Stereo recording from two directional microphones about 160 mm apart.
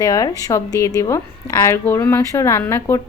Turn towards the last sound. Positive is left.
turn(degrees=15)  # may be behind; listen again after turning